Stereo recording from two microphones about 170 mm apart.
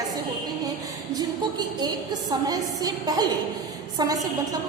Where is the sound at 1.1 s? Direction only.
25° right (ahead or behind).